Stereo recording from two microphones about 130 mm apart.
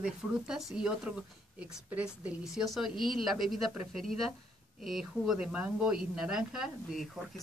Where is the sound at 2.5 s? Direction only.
Centre (ahead or behind).